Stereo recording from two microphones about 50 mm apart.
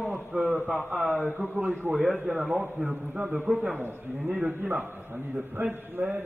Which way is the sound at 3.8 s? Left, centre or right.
Right.